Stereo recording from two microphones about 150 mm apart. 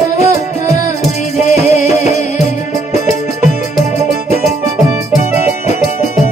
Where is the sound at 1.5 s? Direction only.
50° left (ahead or behind).